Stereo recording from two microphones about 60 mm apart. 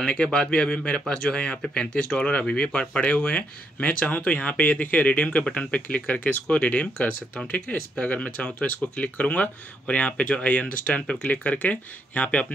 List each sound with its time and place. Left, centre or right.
0.0 s speech: centre